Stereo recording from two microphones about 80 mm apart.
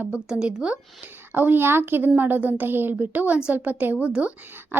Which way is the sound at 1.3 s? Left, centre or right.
Right.